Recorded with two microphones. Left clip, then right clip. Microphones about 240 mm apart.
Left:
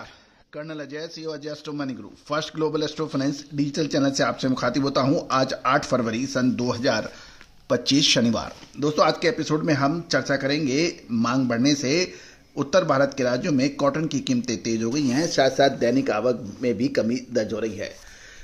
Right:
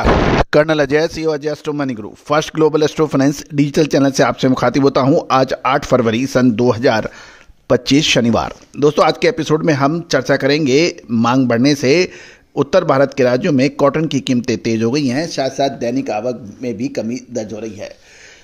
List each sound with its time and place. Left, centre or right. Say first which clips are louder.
0.5 s speech: right 17 dB; right